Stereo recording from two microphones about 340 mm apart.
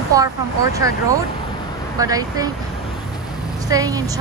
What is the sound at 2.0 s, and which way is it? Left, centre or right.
Speech, centre.